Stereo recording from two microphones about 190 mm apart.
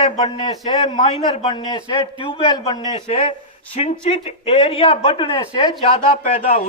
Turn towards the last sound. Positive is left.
turn(degrees=40)  # may be behind; listen again after turning